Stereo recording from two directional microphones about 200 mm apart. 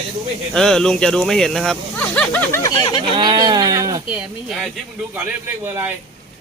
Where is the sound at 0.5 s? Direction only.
5° left (ahead or behind); by 3.0 s 20° left (ahead or behind).